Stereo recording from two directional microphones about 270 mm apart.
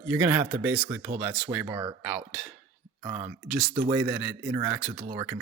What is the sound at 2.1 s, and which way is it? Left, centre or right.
Dishes, centre.